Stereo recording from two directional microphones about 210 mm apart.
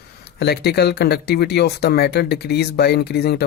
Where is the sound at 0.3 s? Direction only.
50° left (ahead or behind).